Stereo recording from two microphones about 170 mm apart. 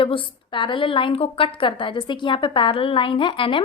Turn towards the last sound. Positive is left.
turn(degrees=30)  # may be behind; listen again after turning